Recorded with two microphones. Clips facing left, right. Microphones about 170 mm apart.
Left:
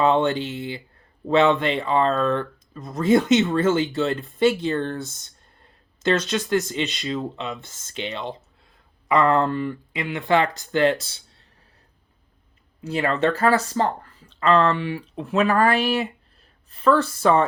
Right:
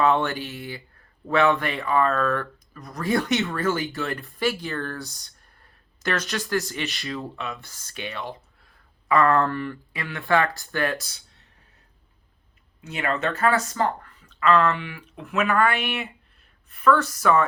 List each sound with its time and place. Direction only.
0.0 s speech: 20° left (ahead or behind)
11.0 s a sound: 30° left (ahead or behind)
12.8 s speech: 35° left (ahead or behind)